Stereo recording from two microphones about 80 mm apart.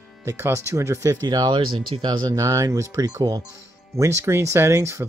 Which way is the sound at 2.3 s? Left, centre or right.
Right.